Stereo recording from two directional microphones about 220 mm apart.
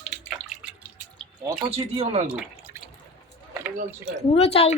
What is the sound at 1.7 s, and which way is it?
Speech, 30° right (ahead or behind).